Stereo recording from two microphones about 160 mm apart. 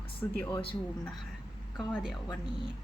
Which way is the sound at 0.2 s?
15° left (ahead or behind).